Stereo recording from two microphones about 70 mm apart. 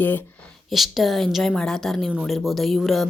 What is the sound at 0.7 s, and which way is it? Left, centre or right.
A woman's voice, centre.